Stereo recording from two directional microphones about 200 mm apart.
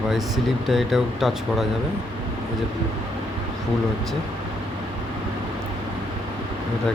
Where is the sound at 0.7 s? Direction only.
Centre (ahead or behind).